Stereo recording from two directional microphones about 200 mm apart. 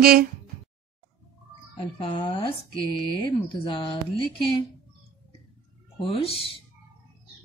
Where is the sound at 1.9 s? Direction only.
30° left (ahead or behind).